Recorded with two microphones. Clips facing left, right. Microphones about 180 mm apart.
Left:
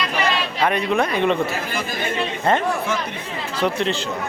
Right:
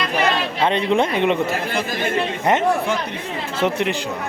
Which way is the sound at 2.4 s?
20° right (ahead or behind).